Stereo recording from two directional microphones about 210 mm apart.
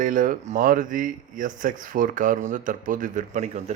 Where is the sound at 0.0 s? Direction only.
40° right (ahead or behind).